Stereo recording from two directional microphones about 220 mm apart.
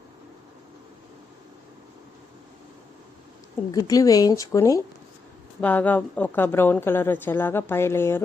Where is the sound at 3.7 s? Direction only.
15° left (ahead or behind).